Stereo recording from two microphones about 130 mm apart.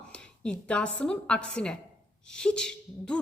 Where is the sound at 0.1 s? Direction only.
5° left (ahead or behind).